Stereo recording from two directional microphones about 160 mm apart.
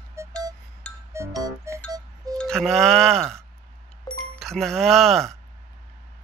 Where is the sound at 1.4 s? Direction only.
20° right (ahead or behind).